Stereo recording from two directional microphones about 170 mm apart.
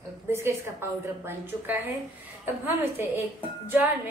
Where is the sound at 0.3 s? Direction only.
15° right (ahead or behind).